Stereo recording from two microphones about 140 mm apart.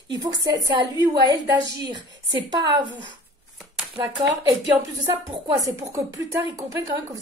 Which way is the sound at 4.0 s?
25° right (ahead or behind).